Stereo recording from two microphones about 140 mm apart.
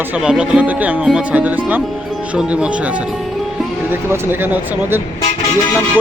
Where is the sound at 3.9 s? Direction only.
15° right (ahead or behind).